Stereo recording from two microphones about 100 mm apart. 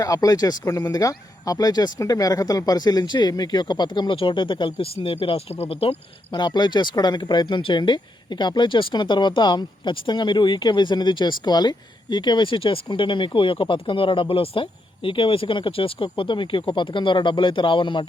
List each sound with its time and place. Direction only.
0.0 s speech: 35° left (ahead or behind); by 6.4 s 70° left (ahead or behind)
6.4 s speech: 45° left (ahead or behind)